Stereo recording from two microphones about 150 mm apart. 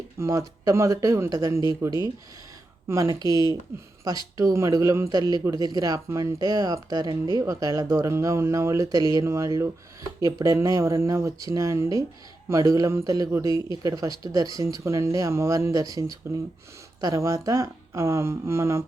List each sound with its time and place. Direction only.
0.2 s speech: 20° right (ahead or behind)
2.8 s speech: 20° right (ahead or behind)